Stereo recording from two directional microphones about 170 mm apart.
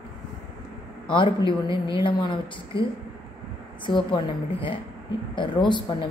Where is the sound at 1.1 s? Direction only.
30° left (ahead or behind).